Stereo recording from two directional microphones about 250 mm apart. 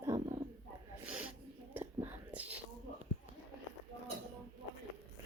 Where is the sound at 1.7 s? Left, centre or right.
Centre.